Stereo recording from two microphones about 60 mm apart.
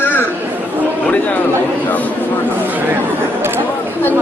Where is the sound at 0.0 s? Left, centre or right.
Left.